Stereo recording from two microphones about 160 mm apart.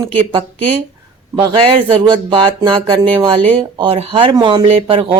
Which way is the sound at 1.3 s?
35° right (ahead or behind).